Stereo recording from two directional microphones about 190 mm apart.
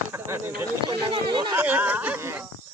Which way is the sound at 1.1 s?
25° right (ahead or behind).